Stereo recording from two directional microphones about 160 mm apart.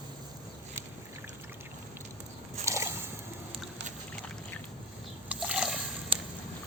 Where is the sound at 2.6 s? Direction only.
20° right (ahead or behind).